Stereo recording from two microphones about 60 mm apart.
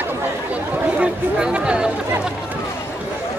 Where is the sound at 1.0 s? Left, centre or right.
Centre.